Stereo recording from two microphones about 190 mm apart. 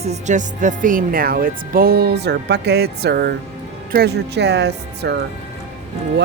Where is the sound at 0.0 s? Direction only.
35° right (ahead or behind).